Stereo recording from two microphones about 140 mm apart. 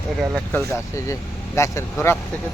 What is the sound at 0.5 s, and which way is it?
Speech, 20° left (ahead or behind).